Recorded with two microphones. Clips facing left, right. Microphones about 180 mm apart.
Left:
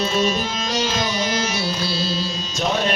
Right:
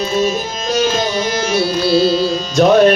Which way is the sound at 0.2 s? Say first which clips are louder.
Right 4 dB; 45° right (ahead or behind).